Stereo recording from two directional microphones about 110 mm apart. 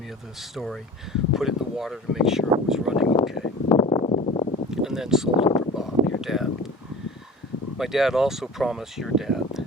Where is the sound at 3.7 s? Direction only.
50° left (ahead or behind).